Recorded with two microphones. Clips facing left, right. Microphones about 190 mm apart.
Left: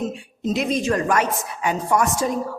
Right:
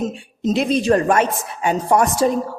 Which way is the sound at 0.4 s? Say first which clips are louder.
Right 4 dB; 30° right (ahead or behind).